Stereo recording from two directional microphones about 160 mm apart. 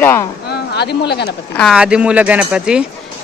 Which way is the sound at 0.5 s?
90° left.